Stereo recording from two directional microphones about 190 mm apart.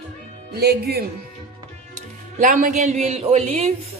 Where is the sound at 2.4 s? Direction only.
45° right (ahead or behind).